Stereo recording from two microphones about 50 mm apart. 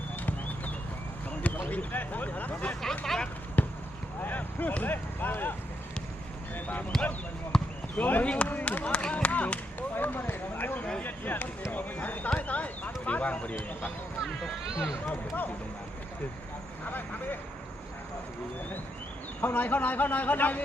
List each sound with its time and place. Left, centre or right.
1.4 s speech: left
3.0 s a sound: centre
3.6 s basketball bounce: left
4.2 s speech: left
6.9 s speech: centre
7.5 s basketball bounce: centre
7.9 s speech: left
11.7 s basketball bounce: left
12.3 s a sound: left
14.7 s speech: centre
19.4 s a man's voice: left